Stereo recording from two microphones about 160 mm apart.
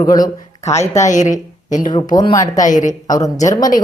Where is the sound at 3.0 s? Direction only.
25° left (ahead or behind).